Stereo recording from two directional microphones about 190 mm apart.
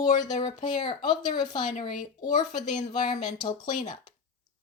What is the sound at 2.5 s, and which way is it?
Speech, 40° left (ahead or behind).